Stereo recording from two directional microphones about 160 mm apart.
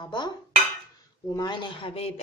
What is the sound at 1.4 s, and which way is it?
Speech, 30° left (ahead or behind).